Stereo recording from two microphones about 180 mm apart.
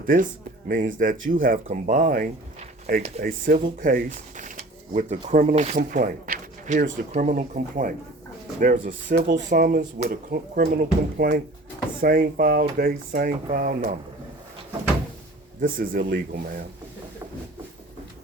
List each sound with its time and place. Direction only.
0.0 s speech: 50° right (ahead or behind)
15.6 s speech: 50° right (ahead or behind)